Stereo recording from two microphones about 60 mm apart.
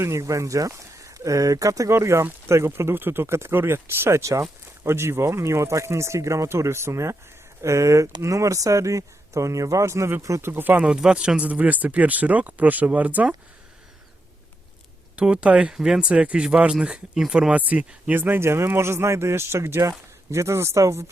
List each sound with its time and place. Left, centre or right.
0.0 s speech: right
1.9 s speech: right
4.2 s speech: right
10.4 s speech: right
10.8 s speech: centre
15.1 s speech: centre
17.5 s speech: right
18.2 s speech: right